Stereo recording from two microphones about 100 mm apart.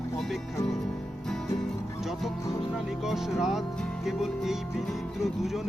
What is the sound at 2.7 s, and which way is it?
Music, centre (ahead or behind).